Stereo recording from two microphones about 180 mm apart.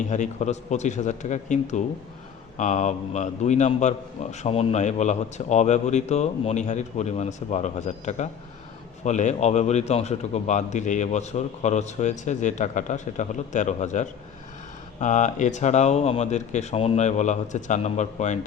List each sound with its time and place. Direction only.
0.1 s a man's voice: 40° left (ahead or behind)